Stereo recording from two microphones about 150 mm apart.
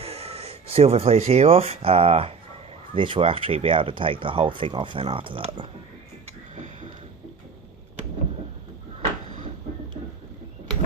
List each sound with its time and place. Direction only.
0.0 s speech: 45° right (ahead or behind)